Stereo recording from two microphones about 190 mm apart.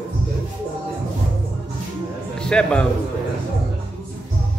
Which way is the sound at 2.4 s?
5° left (ahead or behind).